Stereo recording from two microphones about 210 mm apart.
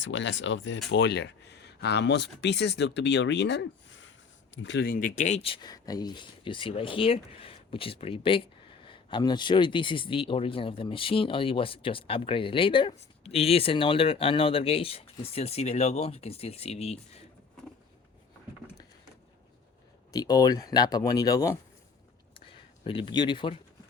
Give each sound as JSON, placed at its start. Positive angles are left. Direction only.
{"t": 0.0, "sound": "speech", "side_deg": 60}
{"t": 20.1, "sound": "speech", "side_deg": 20}
{"t": 22.4, "sound": "a sound", "side_deg": 25}